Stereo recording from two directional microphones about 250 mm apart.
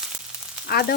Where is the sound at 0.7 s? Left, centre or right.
Left.